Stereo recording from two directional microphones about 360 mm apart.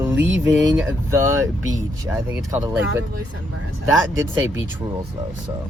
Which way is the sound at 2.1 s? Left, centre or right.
Centre.